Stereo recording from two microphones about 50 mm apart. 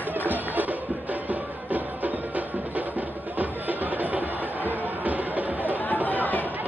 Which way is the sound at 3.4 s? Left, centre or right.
Right.